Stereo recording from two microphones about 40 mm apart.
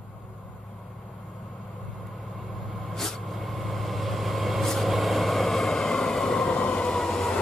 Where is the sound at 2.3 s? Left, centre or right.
Centre.